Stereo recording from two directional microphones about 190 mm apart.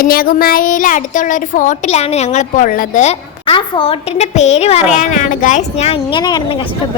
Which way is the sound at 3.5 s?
30° left (ahead or behind).